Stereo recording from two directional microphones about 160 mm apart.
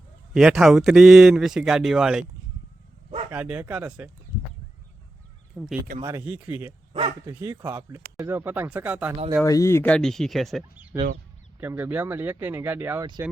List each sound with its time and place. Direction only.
0.3 s speech: 5° right (ahead or behind)
3.3 s speech: 5° right (ahead or behind)
5.5 s speech: centre (ahead or behind)
6.0 s speech: 20° right (ahead or behind)
6.2 s speech: 10° right (ahead or behind)
9.4 s speech: 20° left (ahead or behind); by 10.6 s centre (ahead or behind)
10.9 s speech: 10° right (ahead or behind)
13.0 s speech: 25° right (ahead or behind)